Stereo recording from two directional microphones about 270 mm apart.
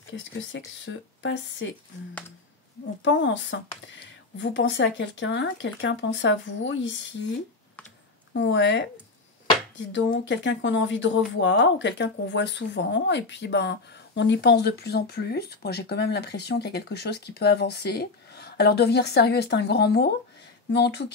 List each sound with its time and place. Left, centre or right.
0.1 s speech: left
3.0 s speech: left
8.3 s speech: left
9.9 s speech: left